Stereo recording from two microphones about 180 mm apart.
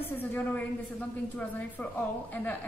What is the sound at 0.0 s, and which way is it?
A woman's voice, 10° left (ahead or behind).